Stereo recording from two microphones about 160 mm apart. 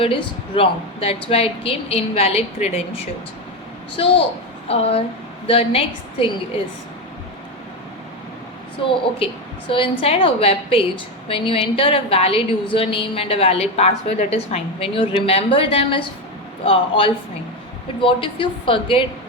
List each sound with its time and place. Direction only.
0.0 s a woman's voice: 35° left (ahead or behind)
8.8 s a woman's voice: 35° left (ahead or behind)